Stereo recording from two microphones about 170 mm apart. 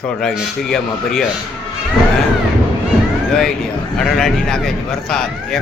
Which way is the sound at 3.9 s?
5° left (ahead or behind).